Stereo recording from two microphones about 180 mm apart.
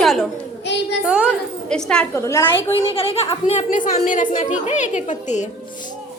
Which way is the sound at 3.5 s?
40° left (ahead or behind).